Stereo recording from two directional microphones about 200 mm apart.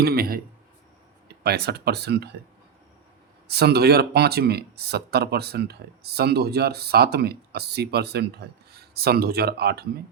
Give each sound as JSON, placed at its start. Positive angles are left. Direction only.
{"t": 0.0, "sound": "a sound", "side_deg": -50}
{"t": 1.5, "sound": "speech", "side_deg": -55}
{"t": 3.4, "sound": "speech", "side_deg": -55}